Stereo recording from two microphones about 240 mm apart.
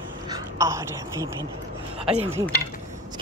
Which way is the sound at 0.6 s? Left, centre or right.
Centre.